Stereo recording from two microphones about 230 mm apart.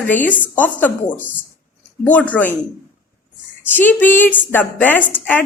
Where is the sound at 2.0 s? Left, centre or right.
Centre.